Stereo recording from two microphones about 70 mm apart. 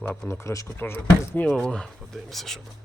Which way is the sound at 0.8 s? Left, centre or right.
Left.